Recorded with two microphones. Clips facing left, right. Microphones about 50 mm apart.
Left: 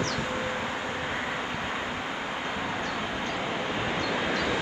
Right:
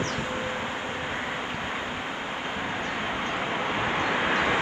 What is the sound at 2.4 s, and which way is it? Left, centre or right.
Vehicle, centre.